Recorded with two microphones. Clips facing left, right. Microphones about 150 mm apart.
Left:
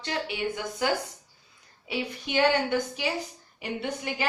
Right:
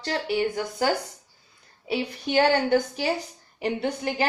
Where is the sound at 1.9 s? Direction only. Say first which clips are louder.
Right 5 dB; 40° right (ahead or behind).